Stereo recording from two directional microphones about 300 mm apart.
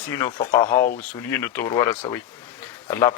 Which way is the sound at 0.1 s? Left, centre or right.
Centre.